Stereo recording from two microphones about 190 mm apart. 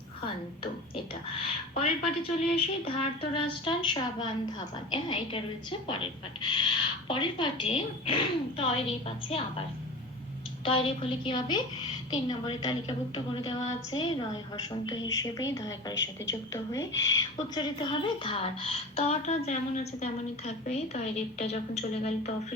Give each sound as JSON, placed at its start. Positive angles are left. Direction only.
{"t": 1.8, "sound": "speech", "side_deg": 30}
{"t": 10.7, "sound": "speech", "side_deg": 25}
{"t": 17.5, "sound": "a woman's voice", "side_deg": 25}